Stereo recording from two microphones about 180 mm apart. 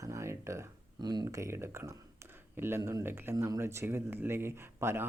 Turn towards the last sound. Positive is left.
turn(degrees=-15)  # may be behind; listen again after turning